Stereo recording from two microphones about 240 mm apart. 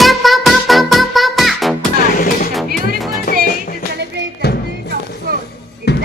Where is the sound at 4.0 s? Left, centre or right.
Right.